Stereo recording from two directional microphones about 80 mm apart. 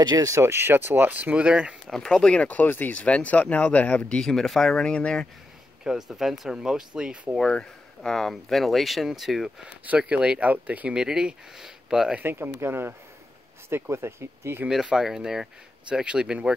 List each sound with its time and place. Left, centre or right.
0.0 s speech: right
0.3 s speech: right; by 1.8 s centre
1.9 s speech: centre
5.9 s speech: centre
7.3 s speech: centre
9.8 s speech: centre
12.2 s speech: right
14.7 s speech: centre